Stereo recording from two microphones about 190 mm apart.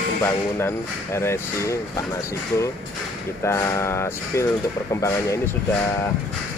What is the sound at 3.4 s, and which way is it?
Speech, 15° left (ahead or behind).